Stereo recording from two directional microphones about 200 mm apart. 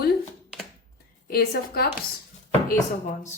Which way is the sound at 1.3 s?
50° left (ahead or behind).